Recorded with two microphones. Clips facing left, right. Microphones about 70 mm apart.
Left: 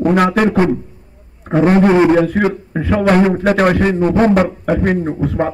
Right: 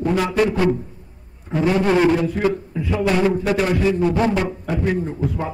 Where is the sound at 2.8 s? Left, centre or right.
Left.